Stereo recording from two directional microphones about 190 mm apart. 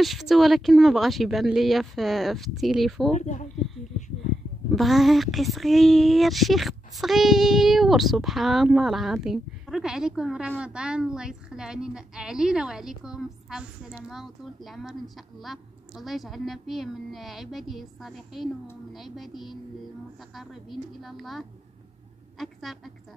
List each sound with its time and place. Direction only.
0.0 s speech: centre (ahead or behind)
3.1 s speech: 40° left (ahead or behind)
4.7 s speech: centre (ahead or behind)